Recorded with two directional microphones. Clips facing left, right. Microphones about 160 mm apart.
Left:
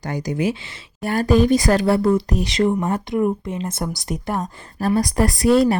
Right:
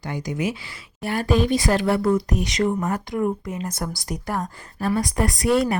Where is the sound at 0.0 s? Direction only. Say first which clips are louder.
Left 4 dB; 40° left (ahead or behind); by 4.4 s 20° left (ahead or behind).